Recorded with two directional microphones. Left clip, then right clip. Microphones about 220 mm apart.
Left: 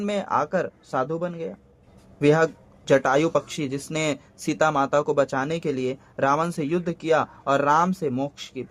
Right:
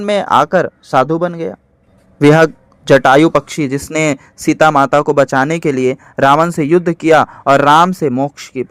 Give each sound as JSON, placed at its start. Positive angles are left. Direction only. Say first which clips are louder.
{"t": 0.0, "sound": "a man's voice", "louder": "right 13 dB", "side_deg": -35}